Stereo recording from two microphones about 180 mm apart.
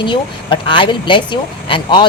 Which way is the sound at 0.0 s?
25° left (ahead or behind).